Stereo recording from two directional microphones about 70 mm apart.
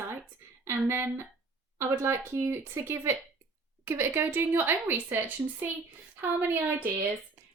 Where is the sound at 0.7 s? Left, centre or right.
Right.